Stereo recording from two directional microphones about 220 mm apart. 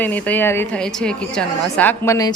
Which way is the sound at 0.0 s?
10° left (ahead or behind).